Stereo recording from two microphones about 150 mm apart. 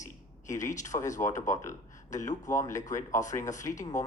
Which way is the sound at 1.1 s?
55° left (ahead or behind).